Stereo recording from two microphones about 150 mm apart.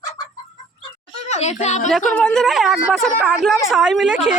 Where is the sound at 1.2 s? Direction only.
50° left (ahead or behind).